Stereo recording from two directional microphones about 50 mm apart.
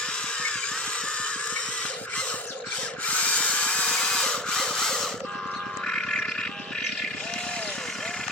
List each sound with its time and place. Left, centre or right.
3.1 s tools: left; by 5.0 s centre
5.9 s music: centre